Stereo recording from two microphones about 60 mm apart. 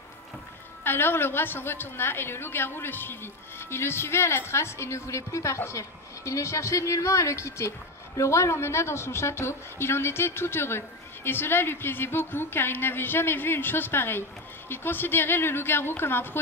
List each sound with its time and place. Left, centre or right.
0.8 s a woman's voice: left